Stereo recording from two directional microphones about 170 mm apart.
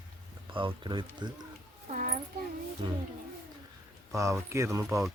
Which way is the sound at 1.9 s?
50° right (ahead or behind).